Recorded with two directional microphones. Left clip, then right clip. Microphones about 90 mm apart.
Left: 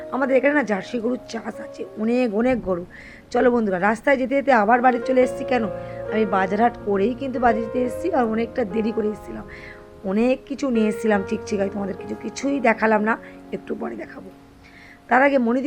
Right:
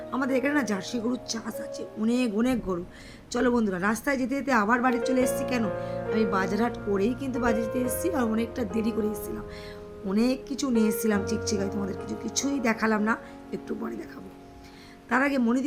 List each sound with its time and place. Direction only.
0.1 s speech: 35° right (ahead or behind)
8.0 s speech: 45° right (ahead or behind)
10.2 s speech: 30° right (ahead or behind)
15.1 s speech: 35° right (ahead or behind)